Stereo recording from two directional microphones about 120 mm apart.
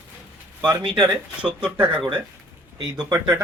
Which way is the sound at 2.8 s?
35° right (ahead or behind).